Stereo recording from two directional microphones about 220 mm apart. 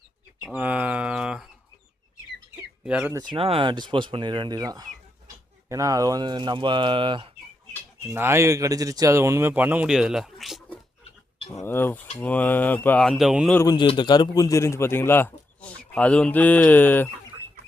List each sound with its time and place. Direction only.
0.4 s bird: 5° right (ahead or behind)
2.8 s speech: 5° right (ahead or behind); by 7.3 s 25° right (ahead or behind)
8.0 s a man's voice: 10° right (ahead or behind)
11.3 s mechanisms: 30° left (ahead or behind)
11.6 s a man's voice: 10° left (ahead or behind)
13.6 s a man's voice: 20° left (ahead or behind)